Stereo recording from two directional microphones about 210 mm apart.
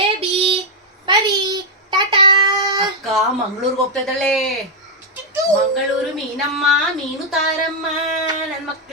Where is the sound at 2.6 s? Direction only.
Centre (ahead or behind).